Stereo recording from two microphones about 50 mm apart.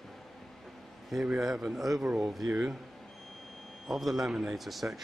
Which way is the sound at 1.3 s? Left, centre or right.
Centre.